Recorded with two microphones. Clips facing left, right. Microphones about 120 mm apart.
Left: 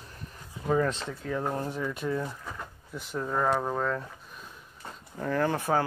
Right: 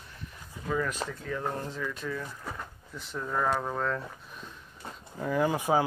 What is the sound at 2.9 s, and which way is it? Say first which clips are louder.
Speech: left 2 dB; 10° left (ahead or behind).